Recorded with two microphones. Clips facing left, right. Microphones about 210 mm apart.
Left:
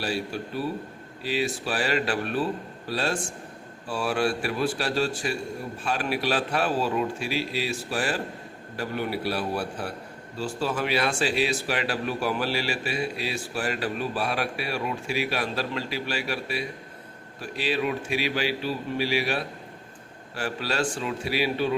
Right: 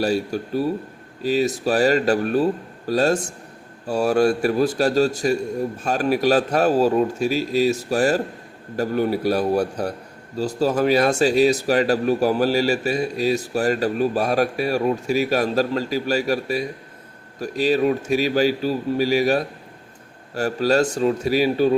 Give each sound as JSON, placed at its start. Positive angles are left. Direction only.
{"t": 0.0, "sound": "a man's voice", "side_deg": -40}